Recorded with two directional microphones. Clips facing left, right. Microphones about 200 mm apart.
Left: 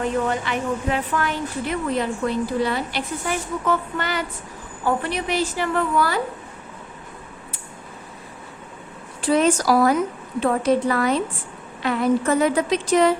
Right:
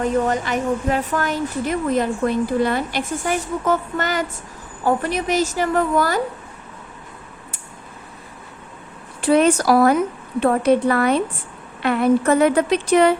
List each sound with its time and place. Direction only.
0.0 s speech: 40° right (ahead or behind)
9.2 s speech: 60° right (ahead or behind)